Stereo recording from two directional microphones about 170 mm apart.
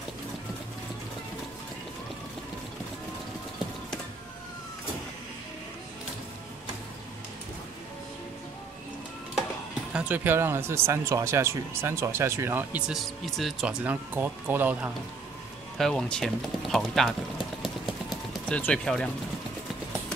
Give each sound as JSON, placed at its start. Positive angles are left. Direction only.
{"t": 9.9, "sound": "speech", "side_deg": -10}
{"t": 15.8, "sound": "speech", "side_deg": 5}
{"t": 17.6, "sound": "a sound", "side_deg": 0}
{"t": 18.6, "sound": "speech", "side_deg": 5}